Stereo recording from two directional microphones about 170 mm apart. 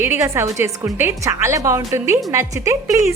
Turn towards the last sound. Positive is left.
turn(degrees=-15)  # may be behind; listen again after turning